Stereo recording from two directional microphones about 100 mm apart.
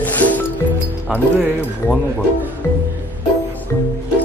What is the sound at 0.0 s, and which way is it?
Music, 15° left (ahead or behind).